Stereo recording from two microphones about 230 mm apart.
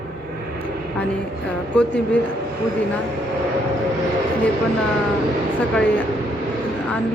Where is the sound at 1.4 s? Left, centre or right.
Centre.